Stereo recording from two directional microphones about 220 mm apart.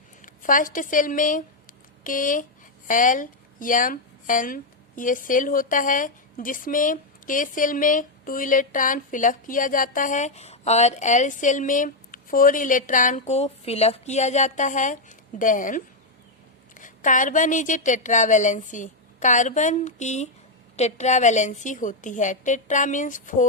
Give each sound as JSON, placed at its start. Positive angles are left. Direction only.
{"t": 0.2, "sound": "a woman's voice", "side_deg": 40}